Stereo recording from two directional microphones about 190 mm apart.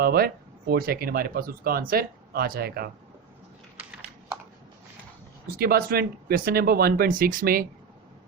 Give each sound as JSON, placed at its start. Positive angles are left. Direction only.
{"t": 0.0, "sound": "speech", "side_deg": -50}
{"t": 5.5, "sound": "speech", "side_deg": -50}